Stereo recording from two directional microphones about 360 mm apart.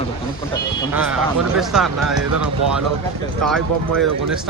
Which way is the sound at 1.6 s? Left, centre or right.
Centre.